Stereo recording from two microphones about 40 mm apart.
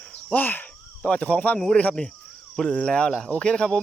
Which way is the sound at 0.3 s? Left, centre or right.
Left.